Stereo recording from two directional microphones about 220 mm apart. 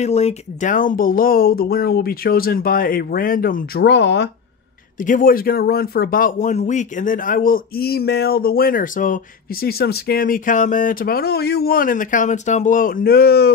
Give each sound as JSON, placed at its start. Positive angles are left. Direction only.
{"t": 0.0, "sound": "speech", "side_deg": 30}
{"t": 5.0, "sound": "speech", "side_deg": 40}